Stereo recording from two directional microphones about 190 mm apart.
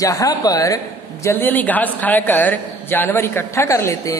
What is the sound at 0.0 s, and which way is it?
A man's voice, 20° left (ahead or behind).